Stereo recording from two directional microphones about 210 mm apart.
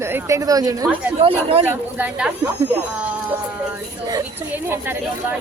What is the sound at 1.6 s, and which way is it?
Speech, 10° right (ahead or behind).